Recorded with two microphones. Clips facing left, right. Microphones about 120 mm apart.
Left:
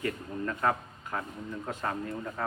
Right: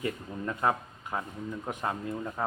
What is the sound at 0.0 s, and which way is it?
A man's voice, 20° right (ahead or behind).